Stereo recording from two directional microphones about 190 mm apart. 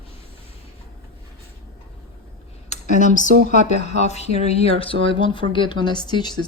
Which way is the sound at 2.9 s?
40° left (ahead or behind).